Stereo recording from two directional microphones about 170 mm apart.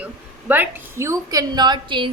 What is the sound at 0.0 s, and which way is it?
A woman's voice, 10° right (ahead or behind).